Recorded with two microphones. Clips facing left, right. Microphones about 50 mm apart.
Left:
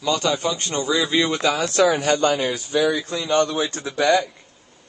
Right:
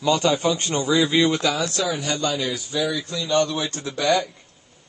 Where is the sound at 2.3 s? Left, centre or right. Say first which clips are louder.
Left 4 dB; left.